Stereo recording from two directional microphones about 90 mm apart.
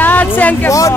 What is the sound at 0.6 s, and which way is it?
Speech, 35° left (ahead or behind).